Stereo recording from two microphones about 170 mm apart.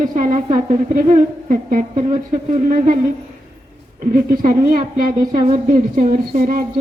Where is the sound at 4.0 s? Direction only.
55° right (ahead or behind).